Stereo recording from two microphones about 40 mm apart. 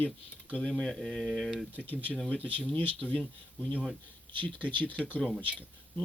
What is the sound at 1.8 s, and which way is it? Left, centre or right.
Speech, left.